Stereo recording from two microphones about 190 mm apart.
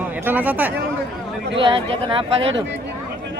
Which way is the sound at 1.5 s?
25° right (ahead or behind).